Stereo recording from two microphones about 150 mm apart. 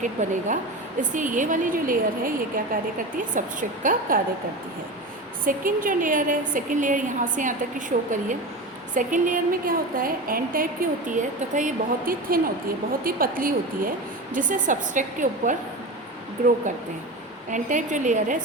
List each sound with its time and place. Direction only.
0.0 s a woman's voice: 55° right (ahead or behind)
5.5 s a woman's voice: 65° right (ahead or behind)
14.3 s a woman's voice: 60° right (ahead or behind)
17.5 s a woman's voice: 55° right (ahead or behind)